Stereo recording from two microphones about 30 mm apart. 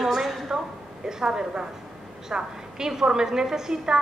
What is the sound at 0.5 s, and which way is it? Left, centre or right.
A woman's voice, centre.